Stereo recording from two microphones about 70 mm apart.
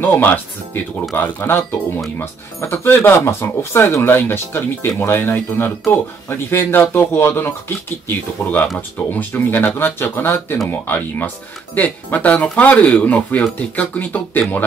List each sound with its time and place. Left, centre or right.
0.0 s speech: left
8.7 s speech: left